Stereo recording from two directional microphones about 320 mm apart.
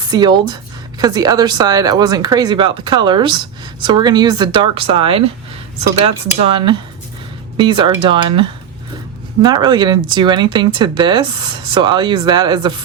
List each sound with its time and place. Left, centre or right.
0.1 s speech: centre
6.4 s speech: centre